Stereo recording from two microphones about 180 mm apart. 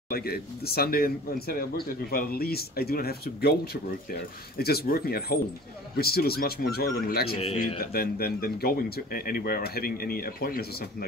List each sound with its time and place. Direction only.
0.1 s speech: 60° left (ahead or behind)